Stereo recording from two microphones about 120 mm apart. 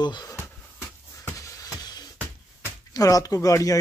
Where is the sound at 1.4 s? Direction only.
30° left (ahead or behind).